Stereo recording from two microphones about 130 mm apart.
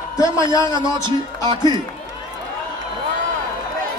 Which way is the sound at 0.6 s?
35° right (ahead or behind).